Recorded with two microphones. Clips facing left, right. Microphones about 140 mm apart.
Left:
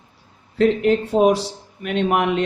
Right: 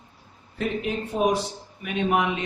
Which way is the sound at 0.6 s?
70° left (ahead or behind).